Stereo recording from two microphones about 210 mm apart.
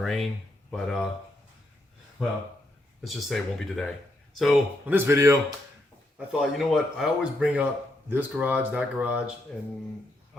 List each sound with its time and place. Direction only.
0.0 s speech: centre (ahead or behind)
3.0 s speech: centre (ahead or behind)
6.1 s speech: 5° right (ahead or behind)